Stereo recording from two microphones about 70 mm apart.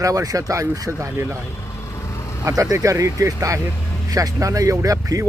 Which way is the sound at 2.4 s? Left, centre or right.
Right.